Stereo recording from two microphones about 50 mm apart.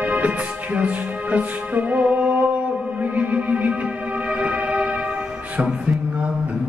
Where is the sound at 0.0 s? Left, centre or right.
Right.